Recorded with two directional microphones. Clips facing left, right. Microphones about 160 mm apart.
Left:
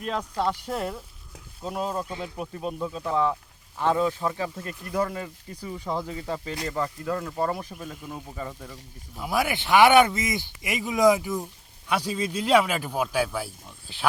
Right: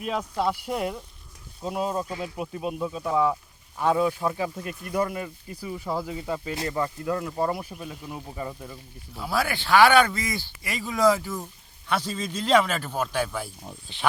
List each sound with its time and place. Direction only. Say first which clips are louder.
0.0 s speech: right 1 dB; 10° right (ahead or behind)
9.1 s speech: left 1 dB; 15° left (ahead or behind)